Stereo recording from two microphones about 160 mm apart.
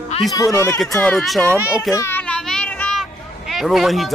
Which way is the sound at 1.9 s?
15° left (ahead or behind).